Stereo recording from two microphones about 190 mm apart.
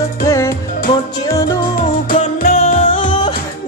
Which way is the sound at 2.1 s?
45° left (ahead or behind).